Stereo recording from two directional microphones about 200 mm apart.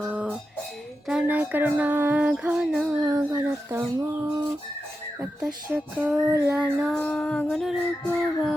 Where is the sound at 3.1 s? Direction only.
20° right (ahead or behind).